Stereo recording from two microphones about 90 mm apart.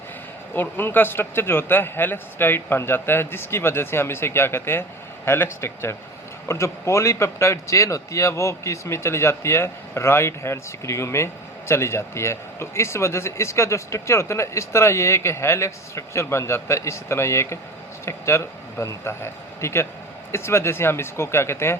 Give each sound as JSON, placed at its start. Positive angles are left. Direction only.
{"t": 0.5, "sound": "a man's voice", "side_deg": 25}